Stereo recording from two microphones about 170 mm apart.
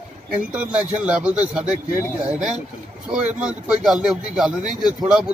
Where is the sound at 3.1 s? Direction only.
5° right (ahead or behind).